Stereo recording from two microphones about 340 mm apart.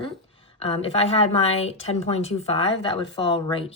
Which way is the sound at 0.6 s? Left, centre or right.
Centre.